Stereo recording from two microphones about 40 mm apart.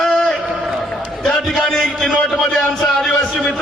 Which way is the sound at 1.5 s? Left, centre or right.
Centre.